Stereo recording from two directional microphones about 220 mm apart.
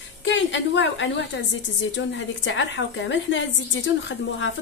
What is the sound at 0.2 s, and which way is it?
A woman's voice, 55° left (ahead or behind).